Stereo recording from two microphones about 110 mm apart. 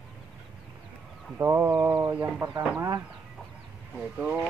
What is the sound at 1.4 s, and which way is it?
Speech, 25° right (ahead or behind).